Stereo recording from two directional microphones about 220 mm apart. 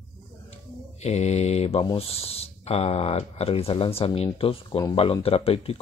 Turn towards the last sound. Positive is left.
turn(degrees=25)  # may be behind; listen again after turning